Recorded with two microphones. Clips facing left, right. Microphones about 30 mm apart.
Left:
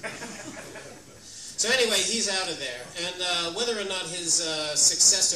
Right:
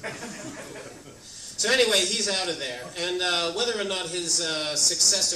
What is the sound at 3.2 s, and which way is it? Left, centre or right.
Speech, centre.